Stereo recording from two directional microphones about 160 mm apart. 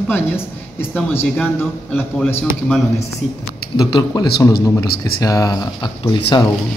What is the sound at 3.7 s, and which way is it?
Speech, 25° left (ahead or behind).